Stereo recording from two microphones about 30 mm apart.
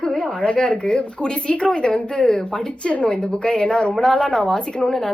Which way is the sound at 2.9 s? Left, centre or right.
Left.